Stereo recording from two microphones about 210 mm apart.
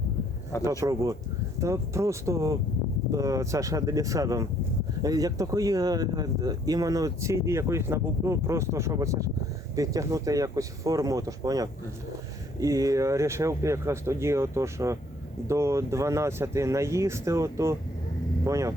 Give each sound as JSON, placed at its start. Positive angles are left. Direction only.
{"t": 0.6, "sound": "speech", "side_deg": -15}